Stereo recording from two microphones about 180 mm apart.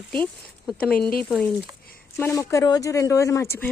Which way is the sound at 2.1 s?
15° left (ahead or behind).